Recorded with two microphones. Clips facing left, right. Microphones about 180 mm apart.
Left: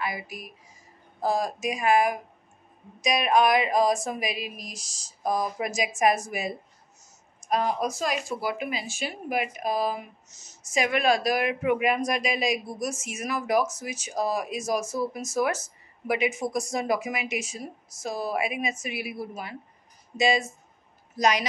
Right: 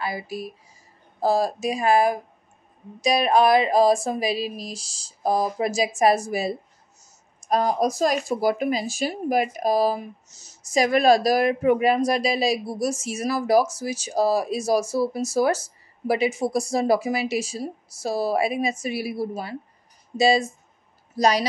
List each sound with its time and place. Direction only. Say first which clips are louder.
0.0 s a woman's voice: right 4 dB; 30° right (ahead or behind)